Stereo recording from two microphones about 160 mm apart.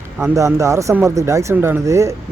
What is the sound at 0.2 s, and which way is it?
A man's voice, 20° right (ahead or behind).